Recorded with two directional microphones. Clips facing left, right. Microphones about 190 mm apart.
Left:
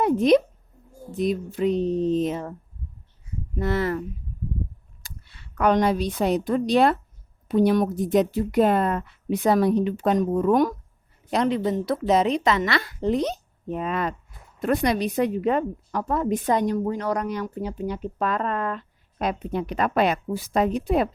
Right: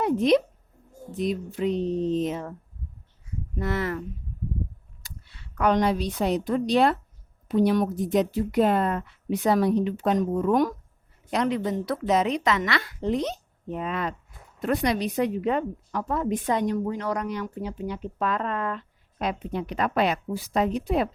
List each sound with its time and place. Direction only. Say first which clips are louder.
0.0 s a woman's voice: left 3 dB; 45° left (ahead or behind)
3.6 s speech: left 4 dB; 30° left (ahead or behind)
5.5 s a woman's voice: left 2 dB; 50° left (ahead or behind)
11.3 s a woman's voice: left 3 dB; 30° left (ahead or behind); by 21.1 s 50° left (ahead or behind)